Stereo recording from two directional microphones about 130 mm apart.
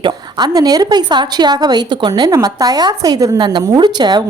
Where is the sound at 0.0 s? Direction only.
35° right (ahead or behind).